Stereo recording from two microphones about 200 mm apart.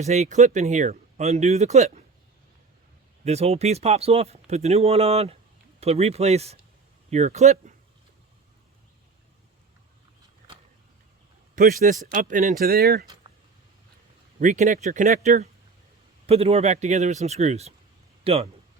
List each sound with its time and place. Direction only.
0.0 s speech: 35° right (ahead or behind)
3.2 s speech: 30° right (ahead or behind)
11.5 s speech: 45° right (ahead or behind)
14.3 s speech: 40° right (ahead or behind)
18.2 s a sound: 30° right (ahead or behind)